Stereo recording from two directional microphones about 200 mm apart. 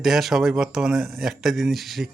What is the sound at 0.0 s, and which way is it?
Speech, centre (ahead or behind).